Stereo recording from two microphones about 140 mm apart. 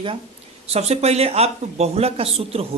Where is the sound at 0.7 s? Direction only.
50° right (ahead or behind).